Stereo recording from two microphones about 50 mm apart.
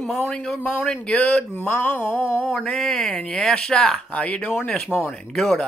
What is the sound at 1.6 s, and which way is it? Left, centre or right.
Speech, left.